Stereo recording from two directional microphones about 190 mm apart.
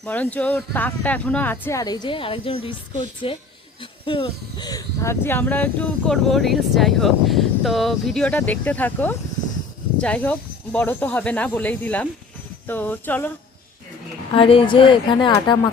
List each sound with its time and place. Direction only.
0.0 s speech: 10° left (ahead or behind)
14.3 s speech: 30° left (ahead or behind)